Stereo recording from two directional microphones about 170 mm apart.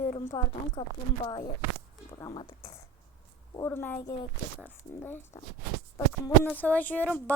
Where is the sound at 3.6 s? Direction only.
15° left (ahead or behind).